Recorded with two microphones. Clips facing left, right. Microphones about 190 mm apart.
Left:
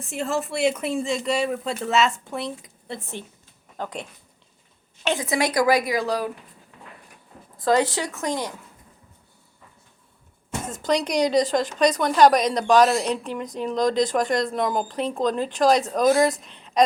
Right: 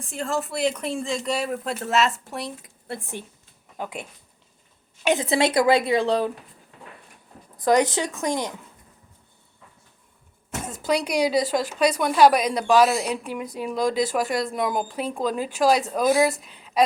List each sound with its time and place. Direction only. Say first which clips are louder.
0.0 s speech: left 1 dB; 5° left (ahead or behind)
2.9 s a woman's voice: right 1 dB; 10° right (ahead or behind)
5.2 s a woman's voice: even; 25° right (ahead or behind)
7.6 s a woman's voice: right 1 dB; 15° right (ahead or behind)
10.7 s a woman's voice: left 1 dB; 10° right (ahead or behind)